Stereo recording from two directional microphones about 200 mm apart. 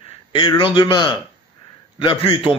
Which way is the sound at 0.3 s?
25° left (ahead or behind).